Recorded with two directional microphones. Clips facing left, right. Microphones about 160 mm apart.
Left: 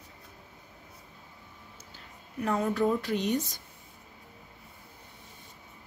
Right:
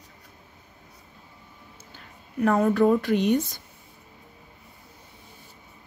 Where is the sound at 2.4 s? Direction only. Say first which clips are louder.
Right 7 dB; 55° right (ahead or behind).